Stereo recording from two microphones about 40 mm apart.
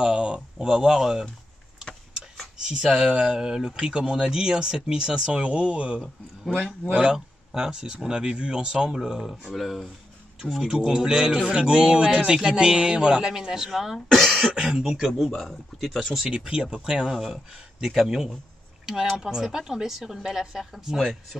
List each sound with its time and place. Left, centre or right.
0.0 s speech: right
2.6 s speech: centre
6.5 s speech: left
6.9 s speech: right
9.6 s speech: centre
10.7 s speech: centre
13.3 s speech: centre
13.9 s speech: centre
14.6 s speech: centre
16.3 s speech: right; by 21.0 s centre